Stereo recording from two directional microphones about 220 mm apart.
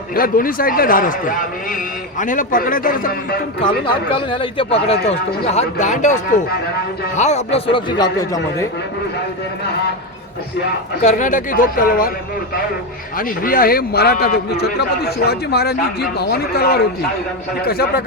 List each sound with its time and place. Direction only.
0.1 s a man's voice: 40° left (ahead or behind)
3.8 s a man's voice: 20° left (ahead or behind)
11.0 s a man's voice: 35° left (ahead or behind)
13.1 s a man's voice: 40° left (ahead or behind)